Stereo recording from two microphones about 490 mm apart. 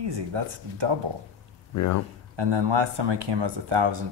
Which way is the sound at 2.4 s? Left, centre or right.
Right.